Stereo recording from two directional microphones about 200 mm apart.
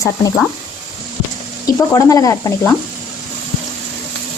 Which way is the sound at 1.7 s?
15° left (ahead or behind).